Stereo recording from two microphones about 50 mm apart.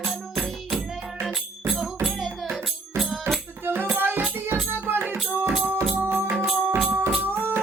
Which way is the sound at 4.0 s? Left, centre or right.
Right.